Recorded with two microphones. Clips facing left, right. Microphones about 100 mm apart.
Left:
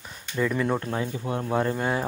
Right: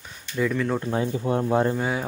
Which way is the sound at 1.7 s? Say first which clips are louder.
Even; 5° right (ahead or behind).